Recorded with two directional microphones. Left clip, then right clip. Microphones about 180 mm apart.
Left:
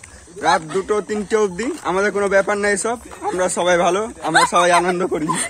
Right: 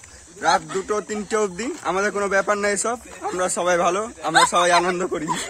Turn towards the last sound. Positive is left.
turn(degrees=-15)  # may be behind; listen again after turning